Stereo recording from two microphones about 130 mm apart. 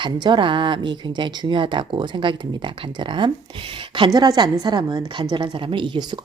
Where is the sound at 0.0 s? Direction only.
40° right (ahead or behind).